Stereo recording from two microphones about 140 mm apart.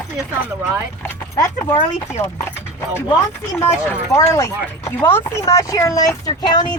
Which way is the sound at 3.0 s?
25° left (ahead or behind).